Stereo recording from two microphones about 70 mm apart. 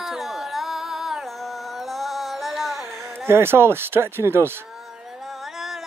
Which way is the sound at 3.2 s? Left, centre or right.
Right.